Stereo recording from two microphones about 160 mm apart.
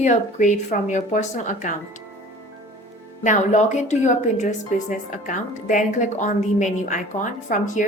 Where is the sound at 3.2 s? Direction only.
50° left (ahead or behind).